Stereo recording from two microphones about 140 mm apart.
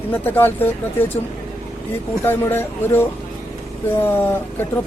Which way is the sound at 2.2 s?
15° left (ahead or behind).